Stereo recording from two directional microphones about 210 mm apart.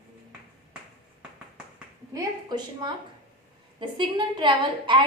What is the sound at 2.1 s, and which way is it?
A woman's voice, 20° right (ahead or behind).